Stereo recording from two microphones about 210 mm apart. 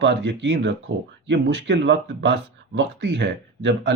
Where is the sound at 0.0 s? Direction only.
55° right (ahead or behind).